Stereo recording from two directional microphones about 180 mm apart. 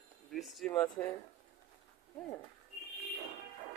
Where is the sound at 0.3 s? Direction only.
Centre (ahead or behind).